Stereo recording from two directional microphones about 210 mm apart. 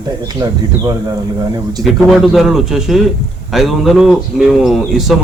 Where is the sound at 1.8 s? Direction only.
Centre (ahead or behind).